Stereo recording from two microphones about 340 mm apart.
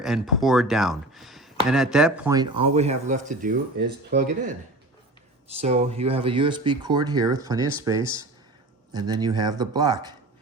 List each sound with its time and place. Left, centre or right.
0.0 s speech: centre